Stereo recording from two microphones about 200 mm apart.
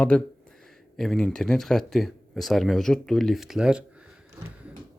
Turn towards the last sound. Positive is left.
turn(degrees=-5)  # may be behind; listen again after turning